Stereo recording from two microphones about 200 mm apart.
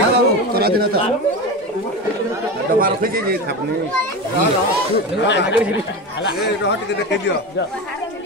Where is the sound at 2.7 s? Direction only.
45° right (ahead or behind).